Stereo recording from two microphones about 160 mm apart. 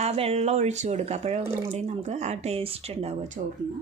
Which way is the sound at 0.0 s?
40° right (ahead or behind).